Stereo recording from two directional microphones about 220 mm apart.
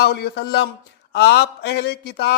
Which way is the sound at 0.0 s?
45° left (ahead or behind).